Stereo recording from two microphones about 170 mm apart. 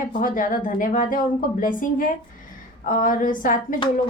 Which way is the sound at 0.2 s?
55° left (ahead or behind).